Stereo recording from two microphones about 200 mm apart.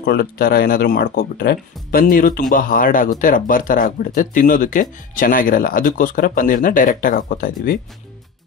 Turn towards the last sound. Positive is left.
turn(degrees=45)  # may be behind; listen again after turning